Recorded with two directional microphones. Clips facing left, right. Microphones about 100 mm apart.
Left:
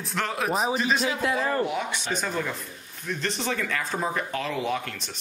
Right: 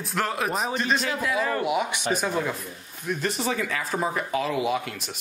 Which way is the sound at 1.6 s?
10° right (ahead or behind).